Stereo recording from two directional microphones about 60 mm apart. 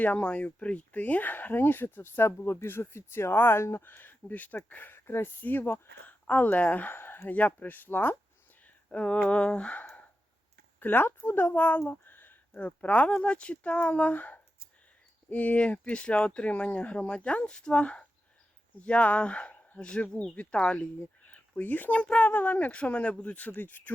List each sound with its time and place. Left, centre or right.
0.0 s speech: left
6.1 s speech: left
8.6 s speech: centre
10.8 s speech: left
12.5 s speech: left
21.2 s a sound: left
22.2 s speech: left